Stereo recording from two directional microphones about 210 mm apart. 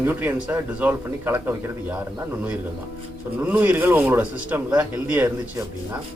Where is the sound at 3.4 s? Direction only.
5° right (ahead or behind).